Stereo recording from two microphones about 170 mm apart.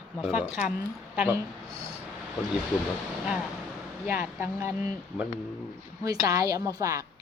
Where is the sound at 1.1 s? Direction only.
10° right (ahead or behind).